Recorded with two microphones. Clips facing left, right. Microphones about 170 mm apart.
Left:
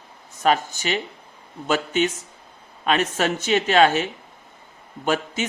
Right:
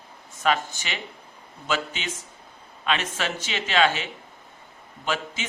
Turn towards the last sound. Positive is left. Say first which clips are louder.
# left 6 dB
turn(degrees=45)  # may be behind; listen again after turning